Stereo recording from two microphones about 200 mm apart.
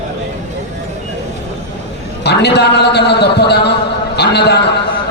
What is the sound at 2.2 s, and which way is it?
A man's voice, 55° left (ahead or behind).